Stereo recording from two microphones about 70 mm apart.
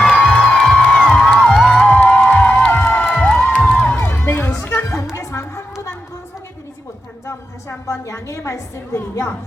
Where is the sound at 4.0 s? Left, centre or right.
Left.